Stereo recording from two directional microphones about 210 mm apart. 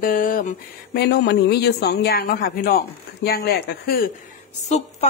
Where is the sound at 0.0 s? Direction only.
40° left (ahead or behind).